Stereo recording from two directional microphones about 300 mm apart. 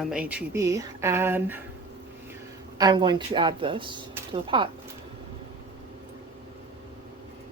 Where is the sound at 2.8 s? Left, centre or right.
Centre.